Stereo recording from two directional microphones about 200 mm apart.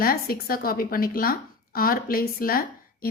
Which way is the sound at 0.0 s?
50° left (ahead or behind).